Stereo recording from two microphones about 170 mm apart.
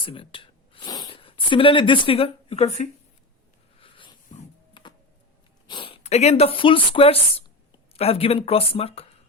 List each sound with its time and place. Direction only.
0.0 s speech: 30° left (ahead or behind)
3.8 s a sound: 30° left (ahead or behind)
4.7 s music: 30° left (ahead or behind)
5.6 s speech: 30° left (ahead or behind)